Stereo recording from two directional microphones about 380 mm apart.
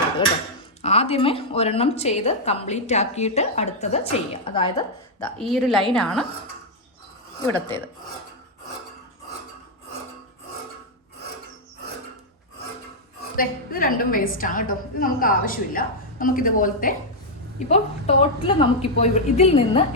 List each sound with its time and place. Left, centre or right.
0.8 s a woman's voice: centre
5.4 s a woman's voice: centre
13.3 s a woman's voice: left